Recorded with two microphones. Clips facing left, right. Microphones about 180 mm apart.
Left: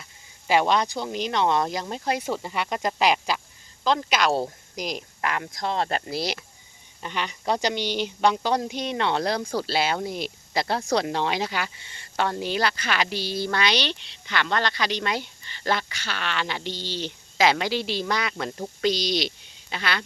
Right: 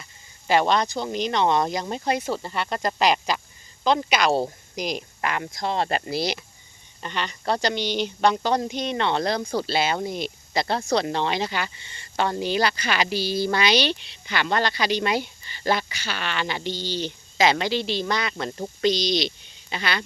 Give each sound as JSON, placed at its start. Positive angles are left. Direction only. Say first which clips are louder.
{"t": 0.0, "sound": "a woman's voice", "louder": "right 1 dB", "side_deg": 5}